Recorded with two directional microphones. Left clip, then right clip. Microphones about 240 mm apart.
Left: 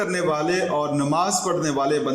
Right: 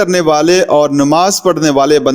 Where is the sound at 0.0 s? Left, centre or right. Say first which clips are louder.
Right 12 dB; right.